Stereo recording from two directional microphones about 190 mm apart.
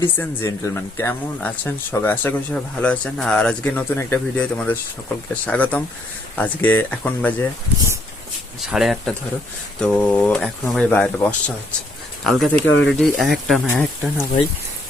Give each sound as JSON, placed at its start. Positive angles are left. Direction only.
{"t": 0.0, "sound": "speech", "side_deg": 10}
{"t": 8.7, "sound": "speech", "side_deg": 0}
{"t": 12.6, "sound": "speech", "side_deg": 80}
{"t": 12.9, "sound": "speech", "side_deg": 0}